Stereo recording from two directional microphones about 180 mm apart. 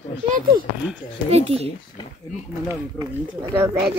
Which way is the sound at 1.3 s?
35° right (ahead or behind).